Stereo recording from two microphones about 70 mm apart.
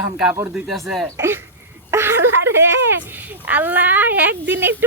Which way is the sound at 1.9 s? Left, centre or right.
Right.